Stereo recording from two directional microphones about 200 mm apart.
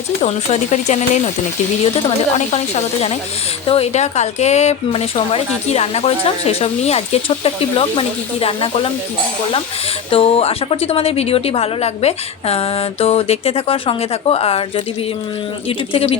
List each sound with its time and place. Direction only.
0.2 s speech: 35° left (ahead or behind)
2.5 s speech: 35° left (ahead or behind)
10.1 s a woman's voice: 30° left (ahead or behind)
15.9 s a woman's voice: 25° left (ahead or behind)